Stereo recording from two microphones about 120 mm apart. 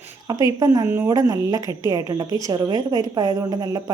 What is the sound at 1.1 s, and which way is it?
A woman's voice, 30° right (ahead or behind).